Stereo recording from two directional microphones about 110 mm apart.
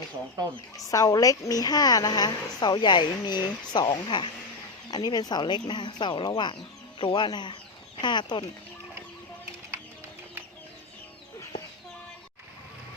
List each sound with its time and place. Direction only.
0.9 s a woman's voice: 35° left (ahead or behind)